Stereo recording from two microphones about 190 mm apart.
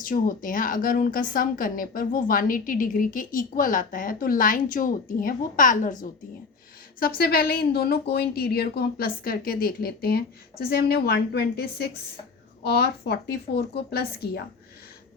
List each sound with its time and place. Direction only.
0.0 s speech: 45° left (ahead or behind)